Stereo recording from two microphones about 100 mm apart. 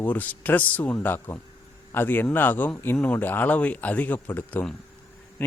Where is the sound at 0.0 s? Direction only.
15° left (ahead or behind).